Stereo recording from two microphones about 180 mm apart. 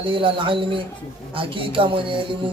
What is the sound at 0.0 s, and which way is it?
Speech, 30° right (ahead or behind).